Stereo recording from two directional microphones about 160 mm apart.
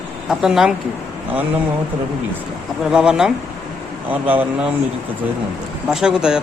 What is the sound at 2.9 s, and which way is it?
Speech, 5° right (ahead or behind).